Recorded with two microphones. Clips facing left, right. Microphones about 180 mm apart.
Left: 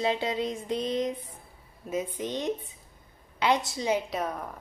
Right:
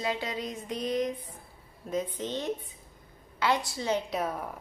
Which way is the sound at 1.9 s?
10° left (ahead or behind).